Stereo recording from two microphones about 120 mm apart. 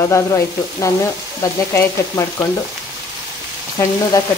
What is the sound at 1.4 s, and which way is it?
Frying, 25° left (ahead or behind).